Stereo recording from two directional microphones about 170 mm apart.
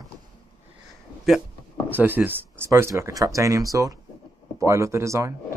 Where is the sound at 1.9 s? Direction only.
10° right (ahead or behind).